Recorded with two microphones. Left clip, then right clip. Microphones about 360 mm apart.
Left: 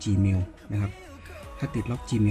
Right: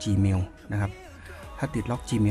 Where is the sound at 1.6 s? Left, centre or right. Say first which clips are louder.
Right 3 dB; centre.